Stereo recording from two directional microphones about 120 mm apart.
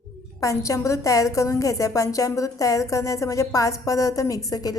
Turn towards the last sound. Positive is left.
turn(degrees=30)  # may be behind; listen again after turning